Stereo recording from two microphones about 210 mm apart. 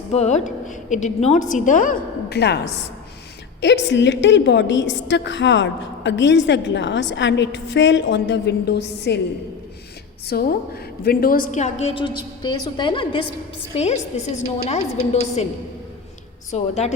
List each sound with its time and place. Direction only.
0.1 s a woman's voice: 30° left (ahead or behind); by 2.6 s 50° left (ahead or behind)
3.6 s a woman's voice: 55° left (ahead or behind)
10.2 s a woman's voice: 45° left (ahead or behind)
16.5 s a woman's voice: 30° left (ahead or behind)